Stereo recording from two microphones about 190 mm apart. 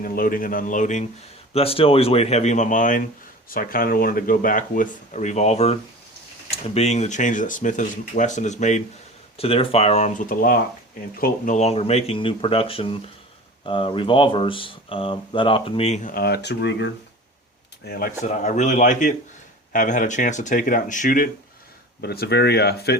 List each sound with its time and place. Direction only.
0.0 s speech: 50° left (ahead or behind)
1.5 s speech: 30° left (ahead or behind)
16.1 s speech: 55° left (ahead or behind)
17.8 s speech: 55° left (ahead or behind)
18.3 s speech: 40° left (ahead or behind)
22.0 s speech: 55° left (ahead or behind)